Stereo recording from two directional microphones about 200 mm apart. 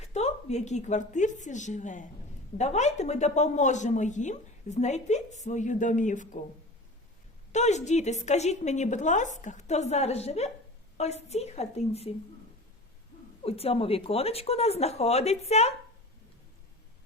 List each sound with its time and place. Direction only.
0.0 s a woman's voice: 35° left (ahead or behind)
7.5 s speech: 35° left (ahead or behind)
13.4 s speech: 30° left (ahead or behind)